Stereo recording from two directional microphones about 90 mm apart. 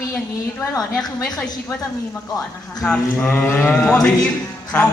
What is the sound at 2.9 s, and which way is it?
Speech, 15° left (ahead or behind).